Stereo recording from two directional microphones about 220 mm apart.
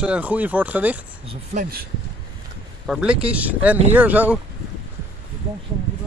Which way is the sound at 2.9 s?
5° right (ahead or behind).